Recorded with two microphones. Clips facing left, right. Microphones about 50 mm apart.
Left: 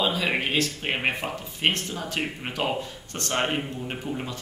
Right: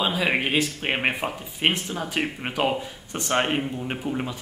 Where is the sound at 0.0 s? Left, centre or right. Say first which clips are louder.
Right 2 dB; centre.